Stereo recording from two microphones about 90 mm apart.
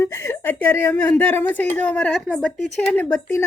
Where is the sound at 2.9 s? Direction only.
20° left (ahead or behind).